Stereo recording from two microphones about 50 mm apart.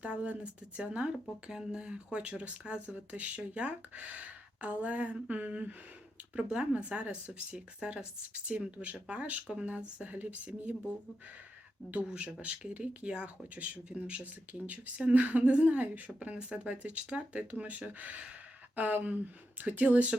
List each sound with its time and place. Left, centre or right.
0.0 s a woman's voice: right
12.1 s a woman's voice: right